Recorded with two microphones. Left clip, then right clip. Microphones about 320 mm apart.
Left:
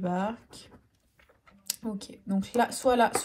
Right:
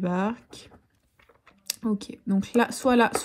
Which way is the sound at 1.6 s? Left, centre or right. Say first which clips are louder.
Right 6 dB; right.